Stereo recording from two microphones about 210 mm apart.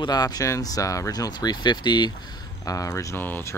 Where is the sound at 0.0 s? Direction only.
20° left (ahead or behind).